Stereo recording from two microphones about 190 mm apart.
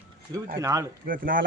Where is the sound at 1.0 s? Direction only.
45° right (ahead or behind).